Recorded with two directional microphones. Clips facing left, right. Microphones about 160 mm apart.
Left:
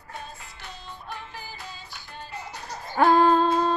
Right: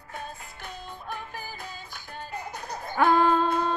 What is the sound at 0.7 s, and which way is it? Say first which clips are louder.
Music: right 2 dB; 50° right (ahead or behind).